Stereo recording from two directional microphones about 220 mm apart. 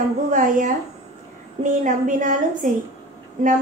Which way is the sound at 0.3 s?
35° right (ahead or behind).